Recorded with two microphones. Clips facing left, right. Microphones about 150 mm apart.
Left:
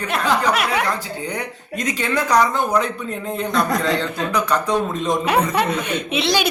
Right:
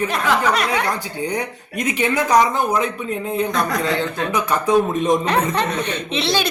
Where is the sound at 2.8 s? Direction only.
5° right (ahead or behind).